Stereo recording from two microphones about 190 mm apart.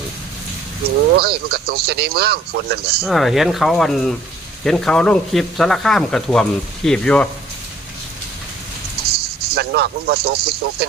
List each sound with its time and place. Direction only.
1.1 s speech: 55° right (ahead or behind)
3.0 s speech: centre (ahead or behind)
9.6 s speech: 55° right (ahead or behind)